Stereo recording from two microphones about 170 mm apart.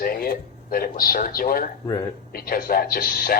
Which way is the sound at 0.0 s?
60° left (ahead or behind).